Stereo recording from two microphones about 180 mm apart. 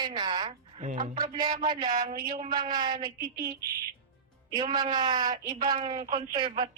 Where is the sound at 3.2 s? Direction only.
55° right (ahead or behind).